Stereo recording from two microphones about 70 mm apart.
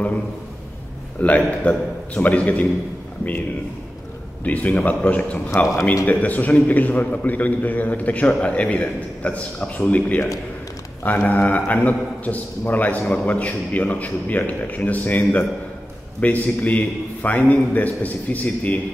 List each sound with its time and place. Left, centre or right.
1.2 s a man's voice: centre
4.5 s a man's voice: left